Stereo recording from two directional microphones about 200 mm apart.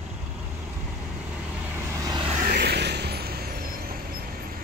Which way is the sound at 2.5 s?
55° right (ahead or behind).